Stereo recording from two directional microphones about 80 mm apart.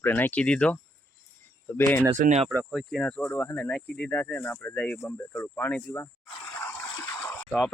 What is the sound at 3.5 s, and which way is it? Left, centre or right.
Speech, centre.